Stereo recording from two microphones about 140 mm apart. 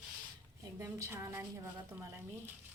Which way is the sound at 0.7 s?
20° right (ahead or behind).